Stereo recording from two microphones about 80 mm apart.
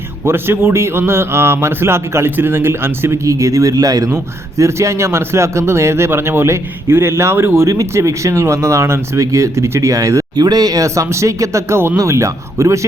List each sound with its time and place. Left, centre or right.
0.3 s speech: right
10.3 s speech: right